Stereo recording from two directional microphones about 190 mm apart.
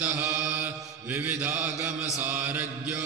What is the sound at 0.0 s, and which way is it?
Mantra, 5° right (ahead or behind).